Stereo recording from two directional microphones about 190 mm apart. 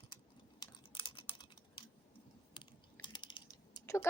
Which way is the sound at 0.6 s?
25° left (ahead or behind).